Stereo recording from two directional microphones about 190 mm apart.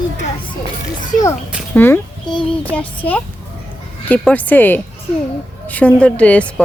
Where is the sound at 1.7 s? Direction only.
10° left (ahead or behind).